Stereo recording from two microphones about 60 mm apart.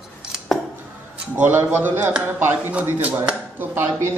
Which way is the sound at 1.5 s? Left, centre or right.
Right.